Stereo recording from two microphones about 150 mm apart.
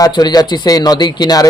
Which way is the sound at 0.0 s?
25° left (ahead or behind).